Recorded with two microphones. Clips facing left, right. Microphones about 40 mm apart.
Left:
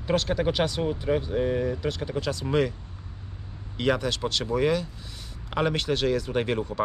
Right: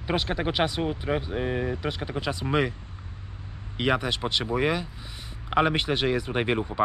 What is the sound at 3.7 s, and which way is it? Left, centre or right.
Speech, right.